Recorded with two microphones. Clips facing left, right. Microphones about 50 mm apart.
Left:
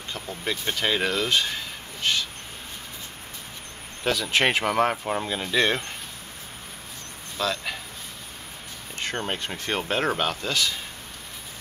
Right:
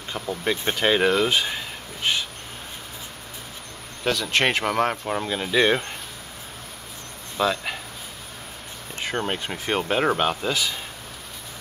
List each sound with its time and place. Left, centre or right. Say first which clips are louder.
0.5 s speech: right 4 dB; centre
4.0 s speech: right 1 dB; centre
7.3 s speech: right 4 dB; centre
9.0 s speech: right 3 dB; centre